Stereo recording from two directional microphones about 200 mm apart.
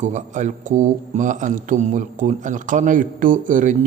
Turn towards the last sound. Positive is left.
turn(degrees=-40)  # may be behind; listen again after turning